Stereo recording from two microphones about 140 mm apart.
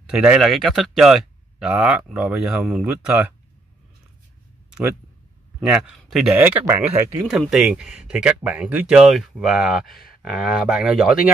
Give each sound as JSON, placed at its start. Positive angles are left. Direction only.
{"t": 0.0, "sound": "speech", "side_deg": -5}
{"t": 5.6, "sound": "speech", "side_deg": -5}
{"t": 6.3, "sound": "speech", "side_deg": -10}
{"t": 7.2, "sound": "speech", "side_deg": -5}